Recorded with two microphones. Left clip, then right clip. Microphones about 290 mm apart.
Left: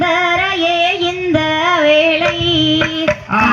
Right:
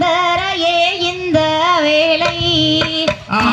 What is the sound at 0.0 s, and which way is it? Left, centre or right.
Female singing, right.